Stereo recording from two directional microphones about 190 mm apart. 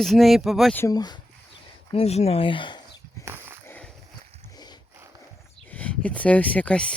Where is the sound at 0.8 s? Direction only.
20° left (ahead or behind).